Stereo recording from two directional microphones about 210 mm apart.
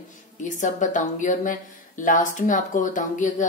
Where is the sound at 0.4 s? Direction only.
35° left (ahead or behind).